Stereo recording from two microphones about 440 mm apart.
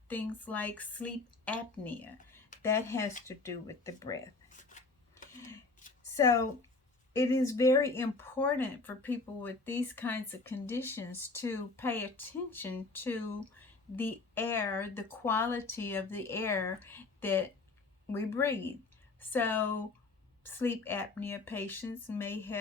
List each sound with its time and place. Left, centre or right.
0.1 s speech: centre
4.4 s shuffling cards: centre
6.1 s speech: centre